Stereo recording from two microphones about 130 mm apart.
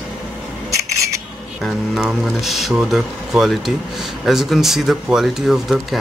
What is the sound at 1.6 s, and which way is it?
Speech, centre (ahead or behind).